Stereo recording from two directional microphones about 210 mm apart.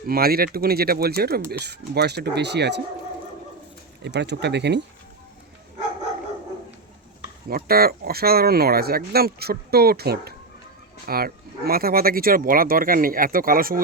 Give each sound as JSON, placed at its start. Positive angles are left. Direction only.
{"t": 0.1, "sound": "speech", "side_deg": -45}
{"t": 4.0, "sound": "speech", "side_deg": -55}
{"t": 7.5, "sound": "speech", "side_deg": -45}